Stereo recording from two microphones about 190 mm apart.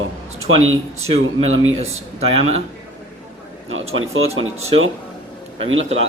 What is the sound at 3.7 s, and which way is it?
Speech, 90° right.